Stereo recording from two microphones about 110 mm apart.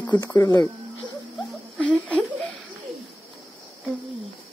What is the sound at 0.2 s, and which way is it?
Speech, 30° left (ahead or behind).